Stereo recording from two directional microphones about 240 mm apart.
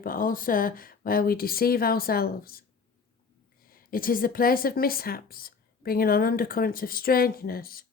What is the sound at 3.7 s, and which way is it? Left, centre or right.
A woman's voice, left.